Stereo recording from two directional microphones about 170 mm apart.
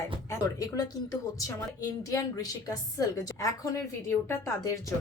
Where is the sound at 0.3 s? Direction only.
20° left (ahead or behind).